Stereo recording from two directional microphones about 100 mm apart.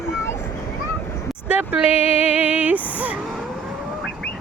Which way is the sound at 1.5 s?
15° right (ahead or behind).